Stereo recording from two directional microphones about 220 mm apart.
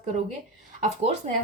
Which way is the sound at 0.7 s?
30° right (ahead or behind).